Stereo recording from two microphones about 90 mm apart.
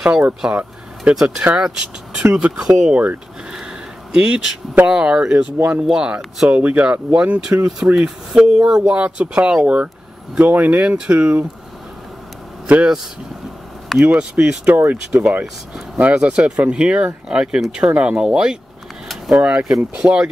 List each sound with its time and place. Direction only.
0.0 s speech: 10° right (ahead or behind)
12.6 s speech: 15° right (ahead or behind)
14.0 s speech: 15° right (ahead or behind)
14.7 s speech: 20° right (ahead or behind)
16.0 s speech: 15° right (ahead or behind)